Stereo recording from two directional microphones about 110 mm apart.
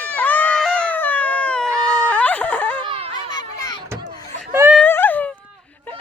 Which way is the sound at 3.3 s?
40° left (ahead or behind).